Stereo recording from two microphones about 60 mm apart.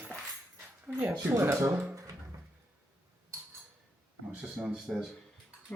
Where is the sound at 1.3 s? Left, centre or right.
Right.